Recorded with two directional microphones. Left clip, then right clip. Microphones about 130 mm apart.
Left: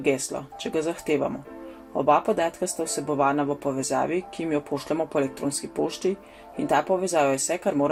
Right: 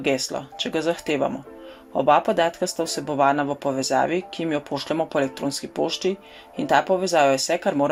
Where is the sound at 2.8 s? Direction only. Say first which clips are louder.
Right 1 dB; 30° right (ahead or behind).